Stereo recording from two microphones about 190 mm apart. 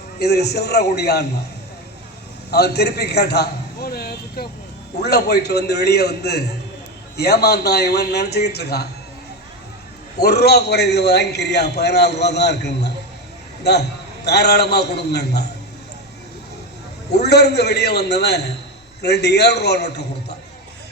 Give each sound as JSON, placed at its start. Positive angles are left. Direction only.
{"t": 0.2, "sound": "a man's voice", "side_deg": 60}
{"t": 2.5, "sound": "a man's voice", "side_deg": 55}
{"t": 10.2, "sound": "a man's voice", "side_deg": 60}
{"t": 14.3, "sound": "a man's voice", "side_deg": 60}
{"t": 17.1, "sound": "a man's voice", "side_deg": 60}